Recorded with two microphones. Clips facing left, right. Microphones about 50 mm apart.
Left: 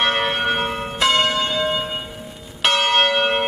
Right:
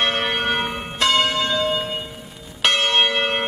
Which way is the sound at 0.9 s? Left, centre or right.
Centre.